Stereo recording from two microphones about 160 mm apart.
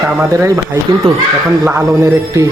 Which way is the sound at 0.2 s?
15° right (ahead or behind).